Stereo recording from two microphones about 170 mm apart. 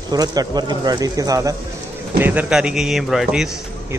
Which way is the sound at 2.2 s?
10° right (ahead or behind).